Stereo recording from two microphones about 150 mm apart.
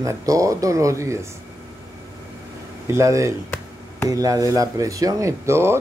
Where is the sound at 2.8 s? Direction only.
20° right (ahead or behind).